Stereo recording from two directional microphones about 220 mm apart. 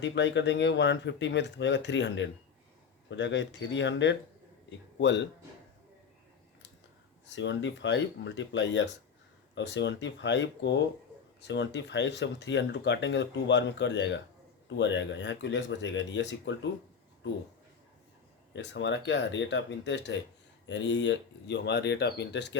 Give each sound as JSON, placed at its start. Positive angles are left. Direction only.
{"t": 0.0, "sound": "speech", "side_deg": 55}
{"t": 7.3, "sound": "speech", "side_deg": 55}
{"t": 18.5, "sound": "speech", "side_deg": 55}